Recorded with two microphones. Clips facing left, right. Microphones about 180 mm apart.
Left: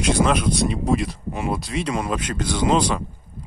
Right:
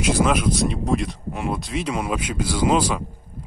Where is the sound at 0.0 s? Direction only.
5° right (ahead or behind).